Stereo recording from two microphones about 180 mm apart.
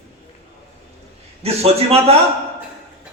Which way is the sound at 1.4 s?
35° right (ahead or behind).